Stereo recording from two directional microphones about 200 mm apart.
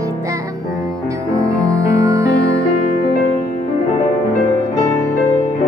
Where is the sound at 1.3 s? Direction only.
15° right (ahead or behind).